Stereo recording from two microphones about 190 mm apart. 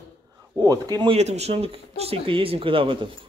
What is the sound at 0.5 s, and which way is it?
Speech, 20° right (ahead or behind).